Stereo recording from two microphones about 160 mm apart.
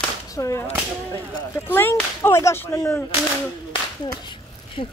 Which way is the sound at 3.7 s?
30° left (ahead or behind).